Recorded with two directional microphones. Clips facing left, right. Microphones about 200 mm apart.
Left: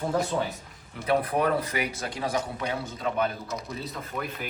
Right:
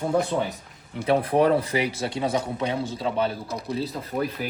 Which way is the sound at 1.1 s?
30° right (ahead or behind).